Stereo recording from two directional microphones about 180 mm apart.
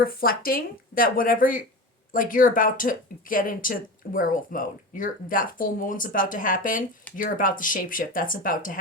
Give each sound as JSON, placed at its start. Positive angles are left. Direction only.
{"t": 0.0, "sound": "speech", "side_deg": 55}